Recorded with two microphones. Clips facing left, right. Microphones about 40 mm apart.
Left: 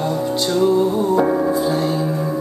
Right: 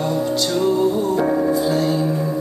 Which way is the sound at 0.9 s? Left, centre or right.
Left.